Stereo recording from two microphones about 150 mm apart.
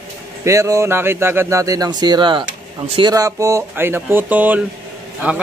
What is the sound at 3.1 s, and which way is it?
A man's voice, 20° right (ahead or behind).